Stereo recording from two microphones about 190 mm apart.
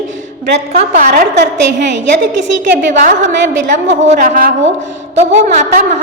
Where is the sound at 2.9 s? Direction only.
45° right (ahead or behind).